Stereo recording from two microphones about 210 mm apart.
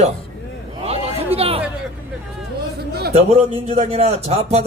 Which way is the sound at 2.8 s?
50° right (ahead or behind).